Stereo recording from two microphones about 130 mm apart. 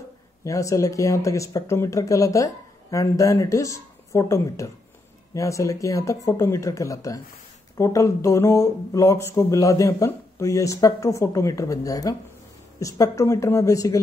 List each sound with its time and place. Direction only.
0.4 s speech: 25° left (ahead or behind)